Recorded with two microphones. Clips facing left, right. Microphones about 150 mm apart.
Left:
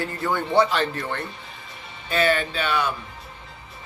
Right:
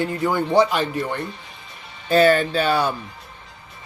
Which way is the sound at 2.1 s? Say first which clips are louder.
Right 6 dB; 40° right (ahead or behind).